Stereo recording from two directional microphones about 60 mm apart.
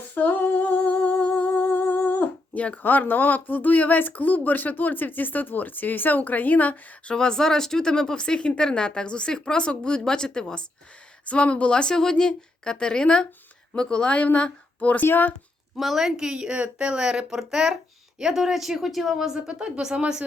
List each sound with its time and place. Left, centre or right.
0.1 s female singing: left
1.1 s a woman's voice: left
15.0 s speech: left
15.8 s a woman's voice: centre